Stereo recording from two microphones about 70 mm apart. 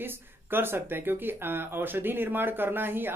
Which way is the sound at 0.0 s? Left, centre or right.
Right.